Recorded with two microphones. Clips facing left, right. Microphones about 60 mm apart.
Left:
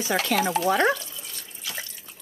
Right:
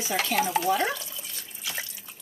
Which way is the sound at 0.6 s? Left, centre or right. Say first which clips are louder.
Left 4 dB; left.